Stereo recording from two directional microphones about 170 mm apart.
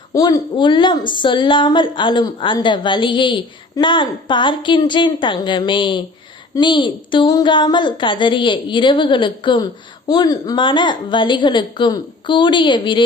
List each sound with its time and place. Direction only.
0.1 s a woman's voice: 20° left (ahead or behind)